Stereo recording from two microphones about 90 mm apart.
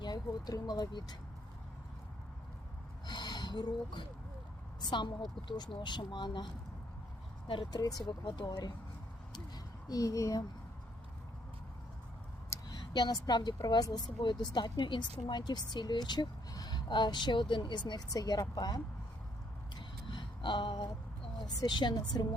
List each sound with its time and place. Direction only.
0.0 s speech: 50° left (ahead or behind)
3.1 s a sound: 50° left (ahead or behind)
4.8 s speech: 60° left (ahead or behind)
7.4 s speech: 70° left (ahead or behind)
7.7 s speech: 45° left (ahead or behind)
8.0 s speech: 60° left (ahead or behind)
8.4 s speech: 45° left (ahead or behind)
9.9 s speech: 40° left (ahead or behind)
12.7 s speech: 55° left (ahead or behind)
19.7 s a sound: 65° left (ahead or behind)
21.3 s speech: 55° left (ahead or behind)